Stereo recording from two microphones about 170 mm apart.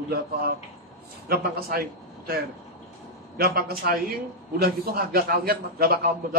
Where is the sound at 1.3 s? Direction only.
65° right (ahead or behind).